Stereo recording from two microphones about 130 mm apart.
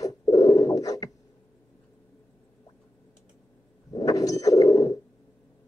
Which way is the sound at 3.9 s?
30° left (ahead or behind).